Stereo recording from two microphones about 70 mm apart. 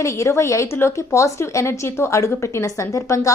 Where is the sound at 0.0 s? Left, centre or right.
Left.